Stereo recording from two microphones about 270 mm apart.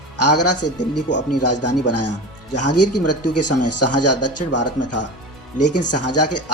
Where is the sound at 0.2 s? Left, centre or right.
Left.